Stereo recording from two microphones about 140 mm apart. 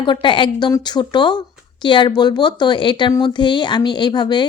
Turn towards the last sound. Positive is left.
turn(degrees=35)  # may be behind; listen again after turning